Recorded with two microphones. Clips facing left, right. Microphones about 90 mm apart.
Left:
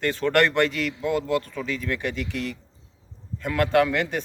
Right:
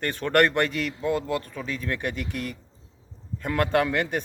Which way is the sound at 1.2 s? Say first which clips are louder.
Left 4 dB; 15° right (ahead or behind).